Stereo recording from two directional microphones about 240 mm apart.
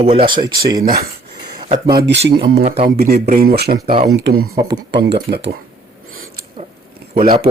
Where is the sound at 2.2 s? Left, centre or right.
Right.